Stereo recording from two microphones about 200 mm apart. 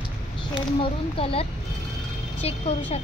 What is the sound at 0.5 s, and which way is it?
A woman's voice, 25° left (ahead or behind).